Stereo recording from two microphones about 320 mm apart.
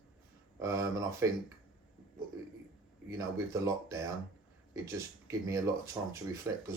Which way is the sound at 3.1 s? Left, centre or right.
Centre.